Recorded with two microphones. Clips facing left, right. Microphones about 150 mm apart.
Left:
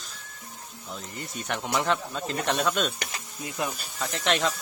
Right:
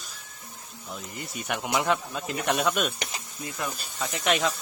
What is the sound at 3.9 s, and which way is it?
Speech, 5° right (ahead or behind).